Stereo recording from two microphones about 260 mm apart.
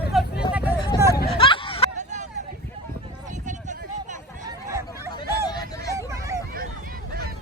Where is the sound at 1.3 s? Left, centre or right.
Centre.